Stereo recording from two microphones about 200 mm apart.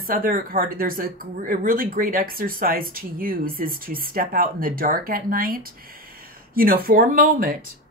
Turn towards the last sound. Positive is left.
turn(degrees=-45)  # may be behind; listen again after turning